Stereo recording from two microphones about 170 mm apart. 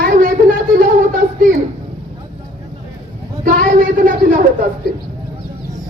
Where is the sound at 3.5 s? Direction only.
55° right (ahead or behind).